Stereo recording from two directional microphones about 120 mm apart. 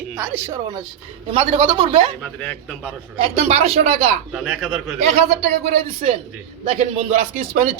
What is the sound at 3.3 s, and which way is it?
Speech, 60° right (ahead or behind).